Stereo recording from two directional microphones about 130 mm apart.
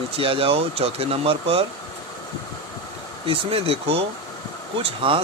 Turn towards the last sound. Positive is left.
turn(degrees=-45)  # may be behind; listen again after turning